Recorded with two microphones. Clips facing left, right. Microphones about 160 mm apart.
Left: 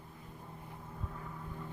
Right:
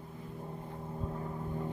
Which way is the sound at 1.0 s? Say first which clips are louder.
Right 8 dB; 30° right (ahead or behind).